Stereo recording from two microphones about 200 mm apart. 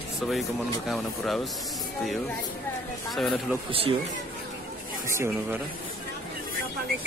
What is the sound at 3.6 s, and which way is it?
Speech, 30° right (ahead or behind).